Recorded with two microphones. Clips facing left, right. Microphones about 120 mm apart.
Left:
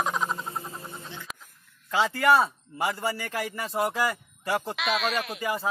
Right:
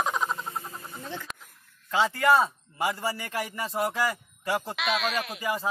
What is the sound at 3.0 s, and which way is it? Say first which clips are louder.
Speech: left 1 dB; 30° right (ahead or behind).